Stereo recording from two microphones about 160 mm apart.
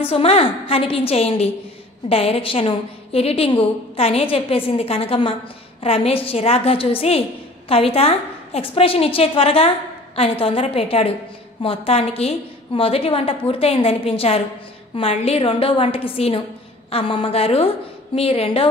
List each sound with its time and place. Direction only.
0.1 s a woman's voice: 35° left (ahead or behind)